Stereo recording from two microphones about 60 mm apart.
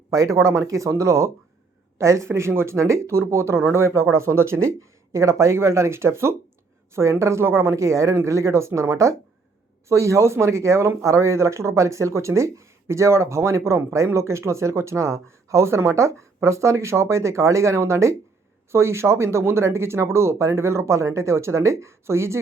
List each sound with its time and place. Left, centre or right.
0.1 s speech: right